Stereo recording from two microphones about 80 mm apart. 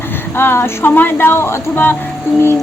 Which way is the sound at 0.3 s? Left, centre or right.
Left.